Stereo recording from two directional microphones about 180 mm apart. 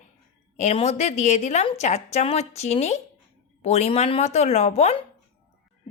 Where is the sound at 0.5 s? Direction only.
35° left (ahead or behind).